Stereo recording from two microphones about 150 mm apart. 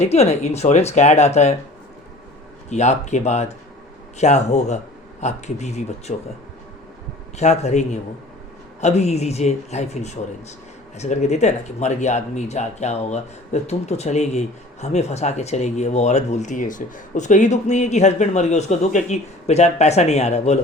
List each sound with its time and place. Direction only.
0.0 s speech: 45° left (ahead or behind)
2.6 s speech: 50° left (ahead or behind)
7.3 s speech: 50° left (ahead or behind)